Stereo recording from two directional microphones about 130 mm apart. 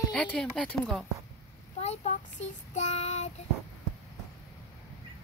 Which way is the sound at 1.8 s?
55° left (ahead or behind).